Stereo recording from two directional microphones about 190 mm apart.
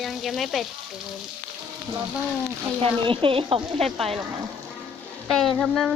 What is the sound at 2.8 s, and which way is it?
Speech, 25° right (ahead or behind).